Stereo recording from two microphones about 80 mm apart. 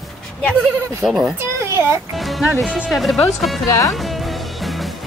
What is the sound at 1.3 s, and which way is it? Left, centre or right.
Speech, right.